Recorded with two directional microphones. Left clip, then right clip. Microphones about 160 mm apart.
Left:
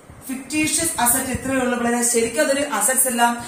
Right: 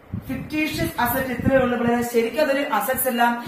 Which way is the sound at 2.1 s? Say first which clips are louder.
Left 1 dB; 10° right (ahead or behind).